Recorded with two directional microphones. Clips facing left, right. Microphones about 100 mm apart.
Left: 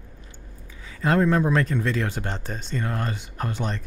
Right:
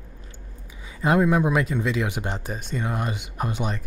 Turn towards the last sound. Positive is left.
turn(degrees=-15)  # may be behind; listen again after turning